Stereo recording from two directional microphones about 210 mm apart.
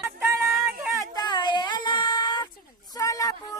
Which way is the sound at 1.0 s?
20° left (ahead or behind).